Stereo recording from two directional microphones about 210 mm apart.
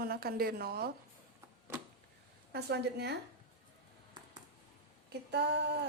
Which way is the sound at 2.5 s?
50° right (ahead or behind).